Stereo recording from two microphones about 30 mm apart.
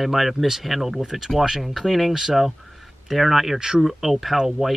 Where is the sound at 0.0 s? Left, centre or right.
Centre.